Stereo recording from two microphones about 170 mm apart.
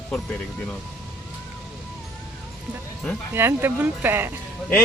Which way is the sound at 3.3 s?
10° right (ahead or behind).